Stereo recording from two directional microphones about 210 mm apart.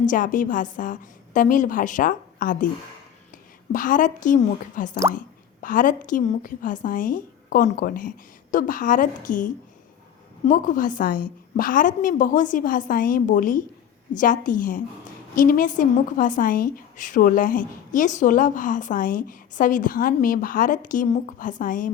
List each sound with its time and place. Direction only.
0.0 s a woman's voice: 40° left (ahead or behind)